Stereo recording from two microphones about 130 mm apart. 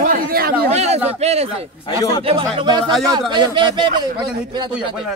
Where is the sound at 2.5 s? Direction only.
35° right (ahead or behind).